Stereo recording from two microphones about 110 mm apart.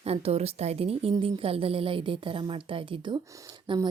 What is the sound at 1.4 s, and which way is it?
A woman's voice, 55° right (ahead or behind).